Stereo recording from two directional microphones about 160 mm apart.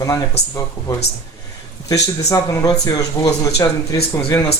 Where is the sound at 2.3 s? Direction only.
20° left (ahead or behind).